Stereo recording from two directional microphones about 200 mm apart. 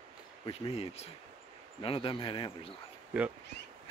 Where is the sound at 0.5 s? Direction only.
30° left (ahead or behind).